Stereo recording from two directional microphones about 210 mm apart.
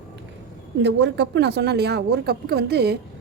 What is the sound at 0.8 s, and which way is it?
A woman's voice, 55° right (ahead or behind).